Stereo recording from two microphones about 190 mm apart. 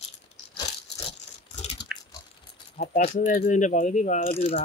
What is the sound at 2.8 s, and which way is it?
Keys jangling, 30° left (ahead or behind).